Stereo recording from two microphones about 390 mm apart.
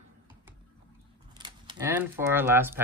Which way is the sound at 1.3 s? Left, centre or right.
Centre.